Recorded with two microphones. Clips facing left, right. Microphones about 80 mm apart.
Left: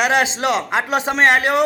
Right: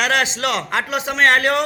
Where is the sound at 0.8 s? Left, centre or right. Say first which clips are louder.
Left 4 dB; left.